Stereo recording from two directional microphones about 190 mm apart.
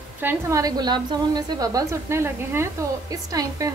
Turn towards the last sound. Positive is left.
turn(degrees=-20)  # may be behind; listen again after turning